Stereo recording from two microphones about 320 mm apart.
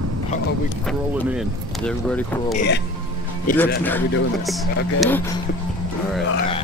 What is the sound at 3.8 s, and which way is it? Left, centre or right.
Speech, centre.